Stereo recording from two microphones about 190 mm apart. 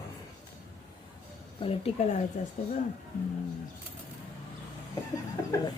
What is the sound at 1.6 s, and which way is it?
Speech, 30° left (ahead or behind).